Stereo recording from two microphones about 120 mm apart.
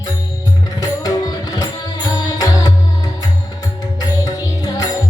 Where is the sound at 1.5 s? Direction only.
35° left (ahead or behind).